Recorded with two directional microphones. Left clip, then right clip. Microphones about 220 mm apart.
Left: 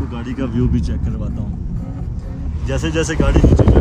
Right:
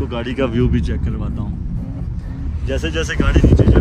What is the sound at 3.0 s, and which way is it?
Speech, 25° left (ahead or behind).